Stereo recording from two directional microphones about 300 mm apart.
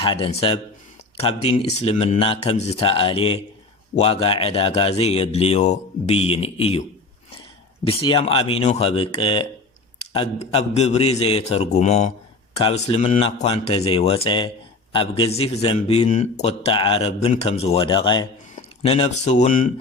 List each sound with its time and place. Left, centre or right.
0.0 s a man's voice: centre
7.9 s a man's voice: centre